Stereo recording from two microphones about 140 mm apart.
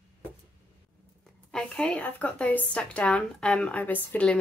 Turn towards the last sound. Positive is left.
turn(degrees=10)  # may be behind; listen again after turning